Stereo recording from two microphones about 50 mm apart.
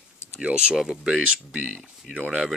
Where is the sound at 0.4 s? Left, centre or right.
Centre.